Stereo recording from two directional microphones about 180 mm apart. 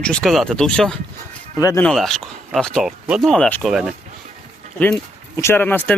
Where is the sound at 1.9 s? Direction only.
Centre (ahead or behind).